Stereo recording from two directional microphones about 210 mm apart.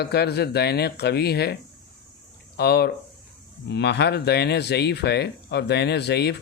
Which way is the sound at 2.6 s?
50° left (ahead or behind).